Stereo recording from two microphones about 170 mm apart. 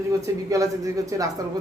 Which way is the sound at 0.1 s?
20° right (ahead or behind).